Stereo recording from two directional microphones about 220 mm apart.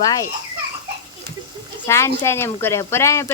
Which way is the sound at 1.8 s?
15° left (ahead or behind).